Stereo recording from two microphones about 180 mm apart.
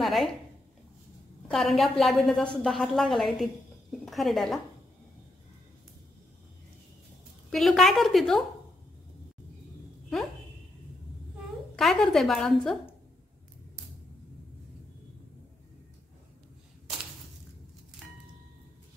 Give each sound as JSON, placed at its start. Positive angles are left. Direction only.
{"t": 0.0, "sound": "a sound", "side_deg": 0}
{"t": 1.5, "sound": "a woman's voice", "side_deg": 0}
{"t": 7.5, "sound": "a woman's voice", "side_deg": 0}
{"t": 11.7, "sound": "a woman's voice", "side_deg": 0}